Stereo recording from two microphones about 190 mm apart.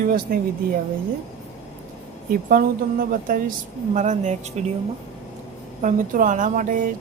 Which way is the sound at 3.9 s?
40° right (ahead or behind).